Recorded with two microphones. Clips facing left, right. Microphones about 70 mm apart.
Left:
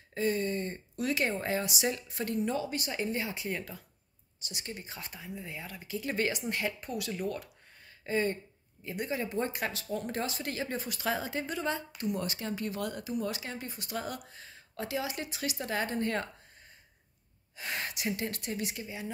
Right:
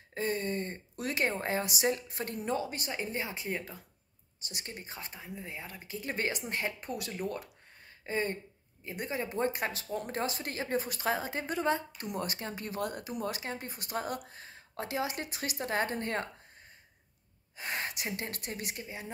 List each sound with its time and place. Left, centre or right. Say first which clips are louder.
0.1 s speech: left 2 dB; right
1.6 s speech: right 2 dB; right
2.9 s speech: left 3 dB; centre
4.5 s speech: left 1 dB; right
8.0 s speech: left 3 dB; right
9.8 s speech: left 1 dB; centre
10.1 s speech: even; right
10.8 s speech: right 1 dB; right
17.6 s speech: right 1 dB; right
18.1 s speech: left 3 dB; right